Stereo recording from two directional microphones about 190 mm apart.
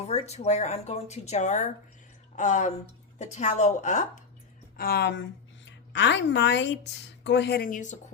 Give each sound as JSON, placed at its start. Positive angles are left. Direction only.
{"t": 0.0, "sound": "speech", "side_deg": 35}
{"t": 4.8, "sound": "a woman's voice", "side_deg": 55}